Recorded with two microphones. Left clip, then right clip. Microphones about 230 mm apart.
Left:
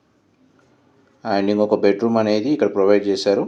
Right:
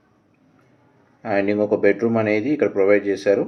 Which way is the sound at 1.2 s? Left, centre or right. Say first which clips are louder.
Left 1 dB; centre.